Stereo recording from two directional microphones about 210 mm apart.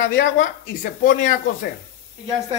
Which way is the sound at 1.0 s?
40° left (ahead or behind).